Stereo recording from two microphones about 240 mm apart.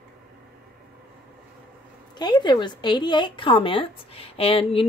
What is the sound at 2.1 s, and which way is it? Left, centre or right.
Speech, centre.